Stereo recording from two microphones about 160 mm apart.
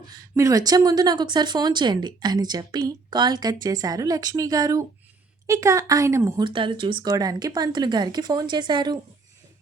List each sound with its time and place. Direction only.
0.2 s speech: 20° right (ahead or behind)
6.4 s speech: 30° right (ahead or behind)